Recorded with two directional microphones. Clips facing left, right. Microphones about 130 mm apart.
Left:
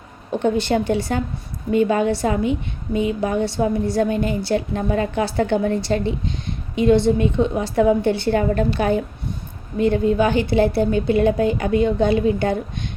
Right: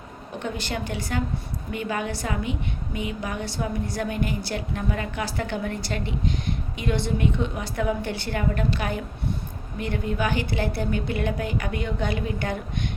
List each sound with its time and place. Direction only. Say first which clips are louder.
0.4 s a woman's voice: left 12 dB; 25° left (ahead or behind)